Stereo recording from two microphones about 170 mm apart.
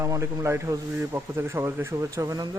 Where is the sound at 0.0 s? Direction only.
20° right (ahead or behind).